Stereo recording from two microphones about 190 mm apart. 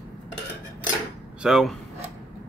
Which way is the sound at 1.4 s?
Centre (ahead or behind).